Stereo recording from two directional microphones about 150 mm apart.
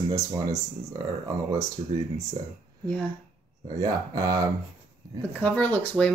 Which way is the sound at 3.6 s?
25° right (ahead or behind).